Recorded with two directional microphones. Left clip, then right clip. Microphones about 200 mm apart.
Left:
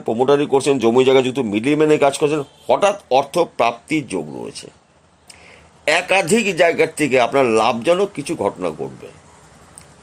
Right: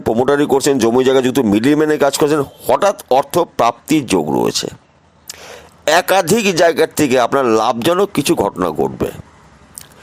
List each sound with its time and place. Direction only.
0.1 s a man's voice: 30° right (ahead or behind)
5.8 s a man's voice: 25° right (ahead or behind)